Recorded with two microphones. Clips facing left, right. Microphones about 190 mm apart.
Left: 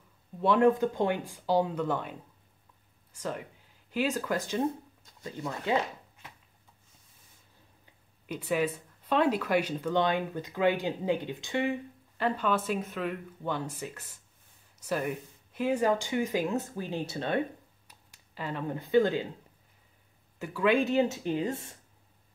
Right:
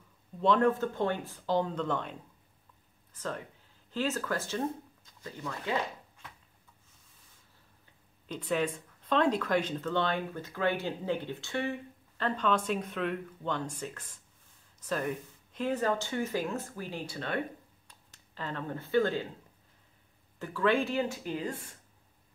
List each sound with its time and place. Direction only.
0.4 s speech: 10° left (ahead or behind)
8.3 s speech: 10° left (ahead or behind)
17.8 s speech: 10° left (ahead or behind)
20.3 s speech: 10° left (ahead or behind)